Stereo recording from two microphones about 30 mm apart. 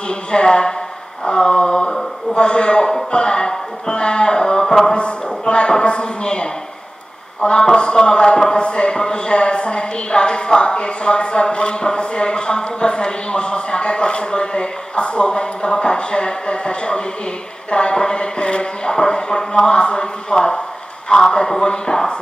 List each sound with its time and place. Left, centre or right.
0.1 s speech: left
1.2 s a sound: left
2.3 s a woman's voice: left
4.9 s a woman's voice: left